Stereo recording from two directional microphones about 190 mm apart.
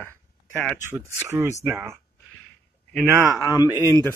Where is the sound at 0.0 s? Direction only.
5° left (ahead or behind).